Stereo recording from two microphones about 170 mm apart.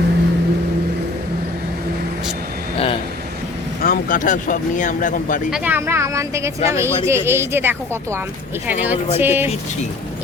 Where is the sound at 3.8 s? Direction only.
55° left (ahead or behind).